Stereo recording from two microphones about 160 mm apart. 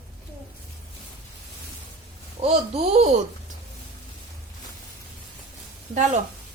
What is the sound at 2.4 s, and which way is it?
Speech, 40° right (ahead or behind).